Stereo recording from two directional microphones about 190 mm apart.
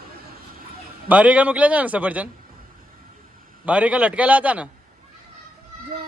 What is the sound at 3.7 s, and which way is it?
Speech, 5° right (ahead or behind).